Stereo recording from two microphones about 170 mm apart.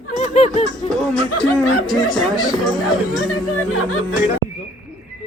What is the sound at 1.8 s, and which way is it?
Speech, centre (ahead or behind).